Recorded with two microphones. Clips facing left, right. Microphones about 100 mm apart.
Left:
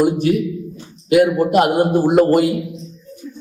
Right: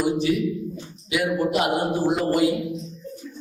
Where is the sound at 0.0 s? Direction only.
55° left (ahead or behind).